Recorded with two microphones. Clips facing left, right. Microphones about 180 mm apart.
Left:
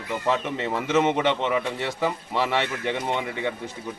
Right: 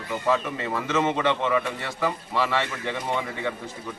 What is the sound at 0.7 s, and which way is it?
A man's voice, 20° left (ahead or behind).